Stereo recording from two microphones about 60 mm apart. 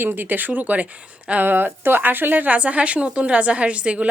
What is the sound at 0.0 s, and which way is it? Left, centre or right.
A woman's voice, right.